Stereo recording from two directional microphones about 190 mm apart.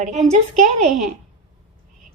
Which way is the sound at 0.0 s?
40° right (ahead or behind).